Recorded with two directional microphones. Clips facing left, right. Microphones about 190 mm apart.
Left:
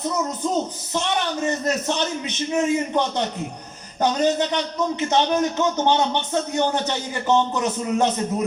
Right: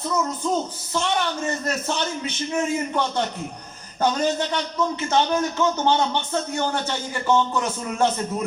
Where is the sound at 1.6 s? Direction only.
20° left (ahead or behind).